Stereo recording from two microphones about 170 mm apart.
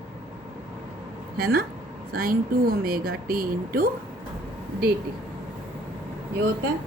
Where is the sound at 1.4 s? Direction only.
60° right (ahead or behind).